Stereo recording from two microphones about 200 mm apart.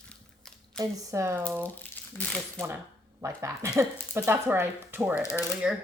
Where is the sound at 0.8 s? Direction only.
15° right (ahead or behind).